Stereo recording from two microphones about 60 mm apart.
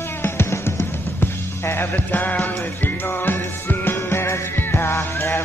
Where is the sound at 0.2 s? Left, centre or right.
Left.